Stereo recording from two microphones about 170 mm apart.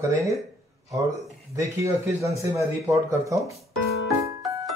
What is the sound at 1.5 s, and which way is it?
Speech, 20° right (ahead or behind).